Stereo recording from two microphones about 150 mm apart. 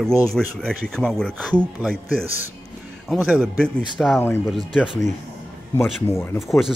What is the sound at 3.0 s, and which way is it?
Speech, 5° right (ahead or behind).